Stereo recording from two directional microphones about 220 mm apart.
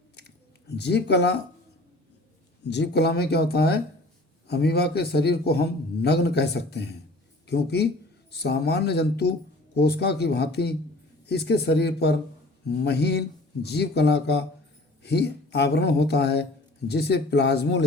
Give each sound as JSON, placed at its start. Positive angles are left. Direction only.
{"t": 0.8, "sound": "a man's voice", "side_deg": 50}
{"t": 2.6, "sound": "a man's voice", "side_deg": 50}